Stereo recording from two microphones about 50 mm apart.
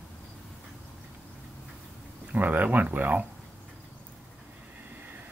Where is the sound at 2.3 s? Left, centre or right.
Right.